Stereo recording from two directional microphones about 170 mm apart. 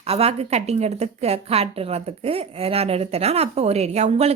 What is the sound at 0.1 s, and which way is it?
A woman's voice, 35° right (ahead or behind).